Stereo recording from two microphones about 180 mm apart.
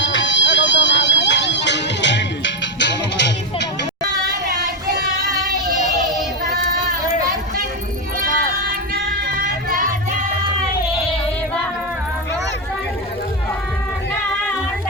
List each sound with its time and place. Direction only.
0.0 s music: 90° left
8.2 s music: 55° right (ahead or behind)